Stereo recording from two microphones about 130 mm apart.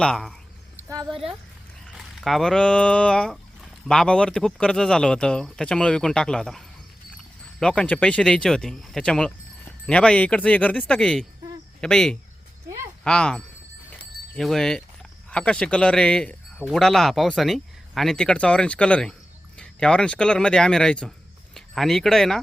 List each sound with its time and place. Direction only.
0.0 s speech: 5° left (ahead or behind)
0.8 s a sound: 25° right (ahead or behind)
2.0 s speech: centre (ahead or behind)
7.6 s speech: 5° left (ahead or behind)